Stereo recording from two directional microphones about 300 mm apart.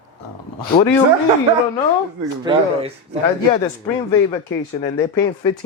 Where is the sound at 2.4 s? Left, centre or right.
Centre.